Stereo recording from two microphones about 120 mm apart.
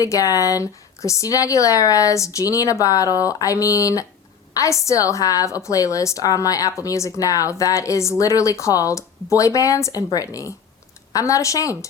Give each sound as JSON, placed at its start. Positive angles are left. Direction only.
{"t": 0.0, "sound": "a woman's voice", "side_deg": 30}